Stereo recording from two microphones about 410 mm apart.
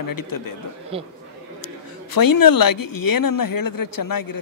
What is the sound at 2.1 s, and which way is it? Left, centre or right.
A man's voice, left.